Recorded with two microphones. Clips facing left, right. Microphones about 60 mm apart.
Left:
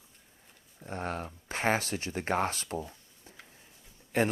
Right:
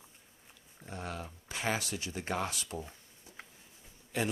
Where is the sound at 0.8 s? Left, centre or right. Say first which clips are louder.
Left 6 dB; left.